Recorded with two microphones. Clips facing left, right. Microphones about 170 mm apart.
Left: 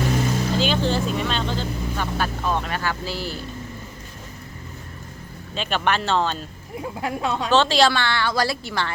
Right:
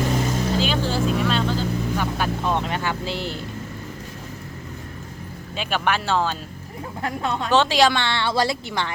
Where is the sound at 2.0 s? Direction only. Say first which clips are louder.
Right 1 dB; 20° right (ahead or behind).